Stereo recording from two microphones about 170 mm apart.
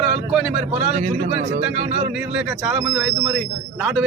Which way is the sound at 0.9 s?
50° right (ahead or behind).